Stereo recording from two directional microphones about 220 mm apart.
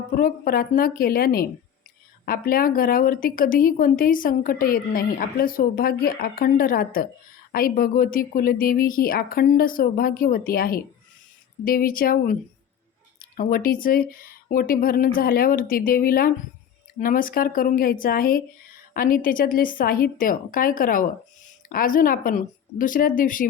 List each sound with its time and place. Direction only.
0.1 s a woman's voice: 40° left (ahead or behind)